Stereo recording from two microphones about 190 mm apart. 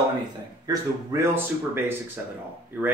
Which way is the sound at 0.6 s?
15° right (ahead or behind).